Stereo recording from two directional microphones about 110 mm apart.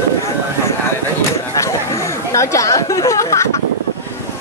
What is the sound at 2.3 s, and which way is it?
Speech, 25° left (ahead or behind).